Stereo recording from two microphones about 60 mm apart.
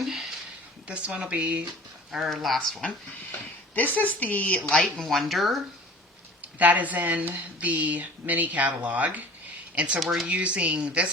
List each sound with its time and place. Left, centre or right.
0.0 s a sound: centre
0.9 s speech: centre
2.1 s speech: centre
3.8 s a woman's voice: left
4.7 s speech: centre
6.4 s speech: right
10.0 s speech: centre
10.2 s speech: right